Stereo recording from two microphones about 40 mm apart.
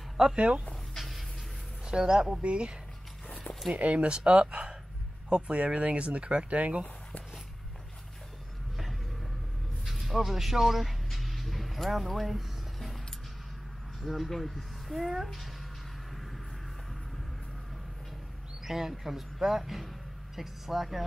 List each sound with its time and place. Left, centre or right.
0.2 s speech: centre
0.9 s music: centre
1.9 s speech: centre
2.4 s speech: right
3.7 s speech: right
9.8 s dog: centre
14.0 s speech: centre
18.7 s speech: centre